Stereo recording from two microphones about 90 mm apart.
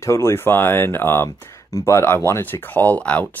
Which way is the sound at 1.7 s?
35° left (ahead or behind).